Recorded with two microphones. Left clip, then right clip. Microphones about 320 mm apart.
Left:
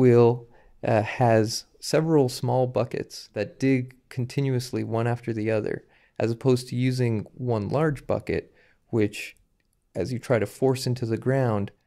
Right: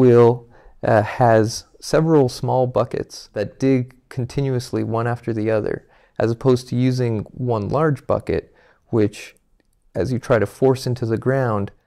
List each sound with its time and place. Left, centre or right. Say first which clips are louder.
0.0 s speech: right 6 dB; right